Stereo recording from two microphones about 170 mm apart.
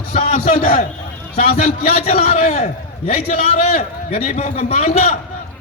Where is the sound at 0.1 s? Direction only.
45° left (ahead or behind).